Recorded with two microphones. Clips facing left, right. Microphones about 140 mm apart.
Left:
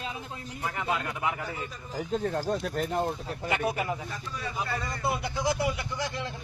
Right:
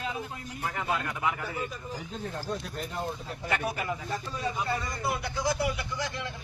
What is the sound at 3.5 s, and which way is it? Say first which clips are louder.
Speech: left 2 dB; 25° left (ahead or behind).